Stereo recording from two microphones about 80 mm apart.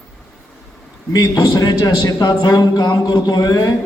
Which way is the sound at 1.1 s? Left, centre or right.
Left.